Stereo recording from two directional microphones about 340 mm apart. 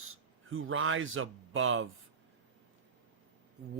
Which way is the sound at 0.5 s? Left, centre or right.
Right.